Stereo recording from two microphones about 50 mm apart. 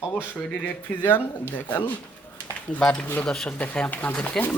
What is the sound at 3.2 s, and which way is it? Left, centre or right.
A man's voice, left.